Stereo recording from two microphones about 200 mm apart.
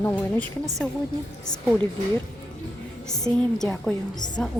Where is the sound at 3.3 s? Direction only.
20° right (ahead or behind).